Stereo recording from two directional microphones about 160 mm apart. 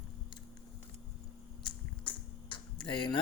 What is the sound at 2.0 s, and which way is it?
Finger snapping, 30° left (ahead or behind).